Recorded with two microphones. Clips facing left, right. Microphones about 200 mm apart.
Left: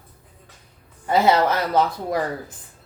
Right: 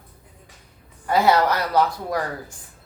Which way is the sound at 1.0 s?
20° left (ahead or behind).